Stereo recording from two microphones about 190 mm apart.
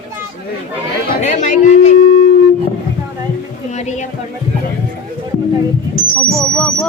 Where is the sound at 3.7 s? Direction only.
40° left (ahead or behind).